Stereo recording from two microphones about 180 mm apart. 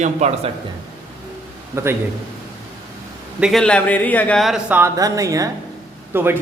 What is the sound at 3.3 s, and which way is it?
A man's voice, centre (ahead or behind).